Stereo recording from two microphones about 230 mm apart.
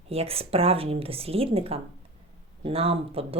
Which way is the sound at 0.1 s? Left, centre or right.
Right.